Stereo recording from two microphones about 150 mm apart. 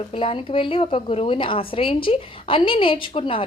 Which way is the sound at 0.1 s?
35° left (ahead or behind).